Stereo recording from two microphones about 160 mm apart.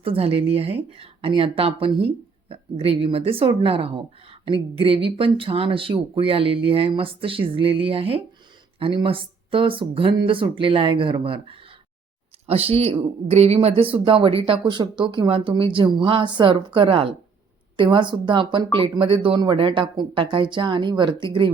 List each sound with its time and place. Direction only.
0.0 s speech: 35° right (ahead or behind)